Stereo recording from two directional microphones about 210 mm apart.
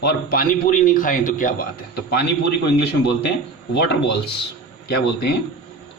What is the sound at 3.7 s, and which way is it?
A man's voice, 55° left (ahead or behind).